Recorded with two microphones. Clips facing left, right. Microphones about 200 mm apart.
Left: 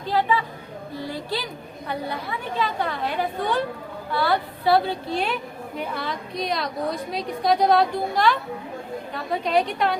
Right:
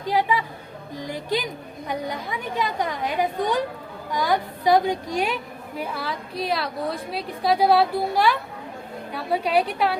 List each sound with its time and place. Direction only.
0.0 s a woman's voice: 15° right (ahead or behind)